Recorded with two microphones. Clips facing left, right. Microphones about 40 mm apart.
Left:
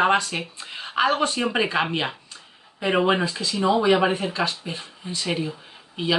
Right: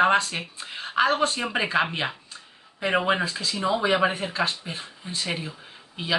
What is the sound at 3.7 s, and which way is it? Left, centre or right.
Speech, centre.